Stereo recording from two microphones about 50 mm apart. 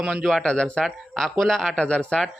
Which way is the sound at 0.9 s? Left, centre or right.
Centre.